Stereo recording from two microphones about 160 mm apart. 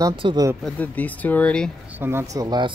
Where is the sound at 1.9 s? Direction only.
15° right (ahead or behind).